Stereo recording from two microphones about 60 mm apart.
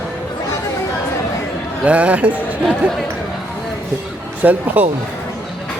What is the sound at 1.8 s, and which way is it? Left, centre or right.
Speech, right.